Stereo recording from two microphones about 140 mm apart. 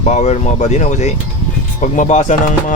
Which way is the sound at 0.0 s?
55° left (ahead or behind).